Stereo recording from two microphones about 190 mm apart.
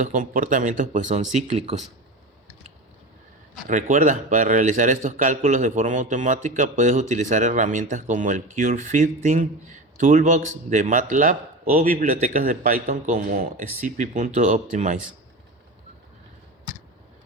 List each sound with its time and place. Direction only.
0.0 s speech: 45° right (ahead or behind)
3.7 s speech: 40° right (ahead or behind)